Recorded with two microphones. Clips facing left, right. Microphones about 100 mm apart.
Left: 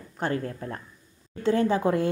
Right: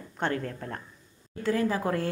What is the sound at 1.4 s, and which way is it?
Speech, 25° left (ahead or behind).